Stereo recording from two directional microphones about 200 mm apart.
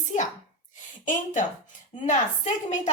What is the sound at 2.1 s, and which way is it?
Speech, 35° left (ahead or behind).